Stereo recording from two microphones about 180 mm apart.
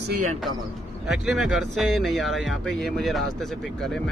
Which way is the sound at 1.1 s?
Centre (ahead or behind).